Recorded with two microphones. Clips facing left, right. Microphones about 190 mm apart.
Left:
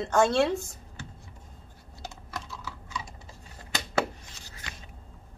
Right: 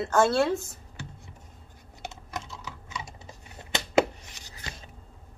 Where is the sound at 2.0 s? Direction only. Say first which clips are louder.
Right 2 dB; 20° right (ahead or behind).